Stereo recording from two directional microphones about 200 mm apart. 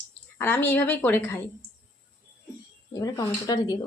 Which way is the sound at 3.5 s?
20° left (ahead or behind).